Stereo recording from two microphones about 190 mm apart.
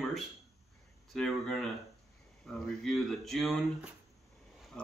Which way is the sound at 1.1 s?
5° left (ahead or behind).